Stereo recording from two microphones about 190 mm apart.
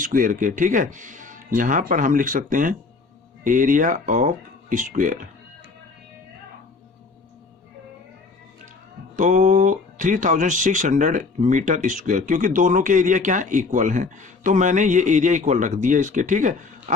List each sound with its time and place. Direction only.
0.0 s speech: 45° right (ahead or behind)
9.1 s speech: 40° right (ahead or behind)